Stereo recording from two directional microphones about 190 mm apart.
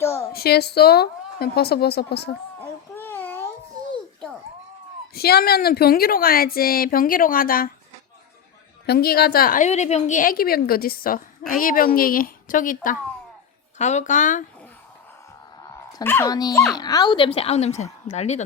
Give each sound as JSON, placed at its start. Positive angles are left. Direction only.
{"t": 0.0, "sound": "a sound", "side_deg": 15}
{"t": 0.3, "sound": "a woman's voice", "side_deg": 55}
{"t": 2.6, "sound": "baby cry", "side_deg": 10}
{"t": 5.1, "sound": "a woman's voice", "side_deg": 55}
{"t": 8.9, "sound": "a woman's voice", "side_deg": 55}
{"t": 15.9, "sound": "speech", "side_deg": 15}